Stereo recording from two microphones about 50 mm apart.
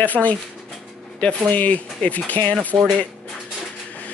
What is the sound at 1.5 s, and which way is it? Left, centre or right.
Speech, left.